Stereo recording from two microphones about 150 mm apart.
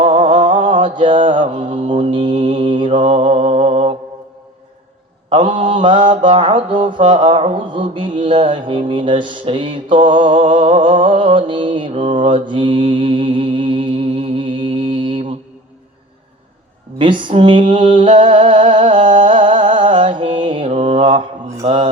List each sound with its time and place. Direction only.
0.0 s mantra: 35° right (ahead or behind)
5.3 s mantra: 35° right (ahead or behind)
17.0 s a sound: 30° right (ahead or behind)
21.6 s mantra: 40° right (ahead or behind)